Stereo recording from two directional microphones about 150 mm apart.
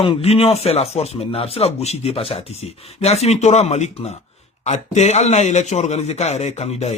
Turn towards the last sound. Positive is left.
turn(degrees=45)  # may be behind; listen again after turning